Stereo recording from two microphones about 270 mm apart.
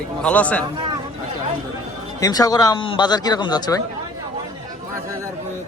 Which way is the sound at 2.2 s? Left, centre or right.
Centre.